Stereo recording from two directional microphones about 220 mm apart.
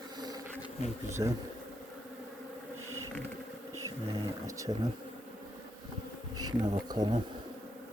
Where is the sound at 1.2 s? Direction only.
20° right (ahead or behind).